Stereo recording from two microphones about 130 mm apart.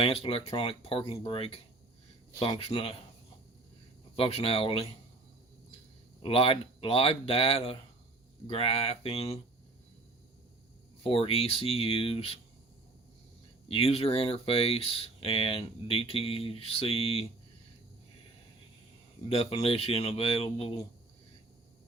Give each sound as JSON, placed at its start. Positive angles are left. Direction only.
{"t": 0.0, "sound": "speech", "side_deg": 45}
{"t": 4.1, "sound": "speech", "side_deg": 50}
{"t": 6.2, "sound": "speech", "side_deg": 45}
{"t": 11.0, "sound": "speech", "side_deg": 45}
{"t": 13.7, "sound": "speech", "side_deg": 50}
{"t": 19.3, "sound": "speech", "side_deg": 45}